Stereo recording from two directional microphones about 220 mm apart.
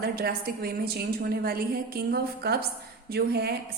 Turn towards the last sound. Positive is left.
turn(degrees=-45)  # may be behind; listen again after turning